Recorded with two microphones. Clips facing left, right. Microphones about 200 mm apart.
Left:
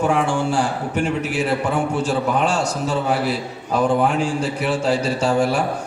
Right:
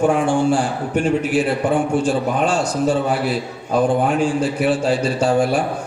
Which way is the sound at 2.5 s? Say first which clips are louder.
Right 4 dB; 55° right (ahead or behind).